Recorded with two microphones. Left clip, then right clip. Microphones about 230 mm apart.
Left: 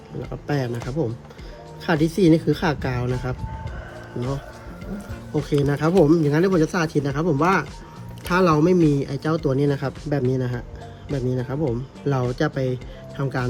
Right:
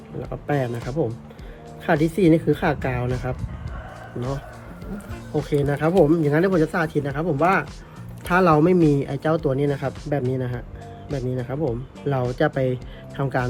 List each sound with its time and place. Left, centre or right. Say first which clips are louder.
0.2 s speech: right 2 dB; centre
5.5 s speech: even; centre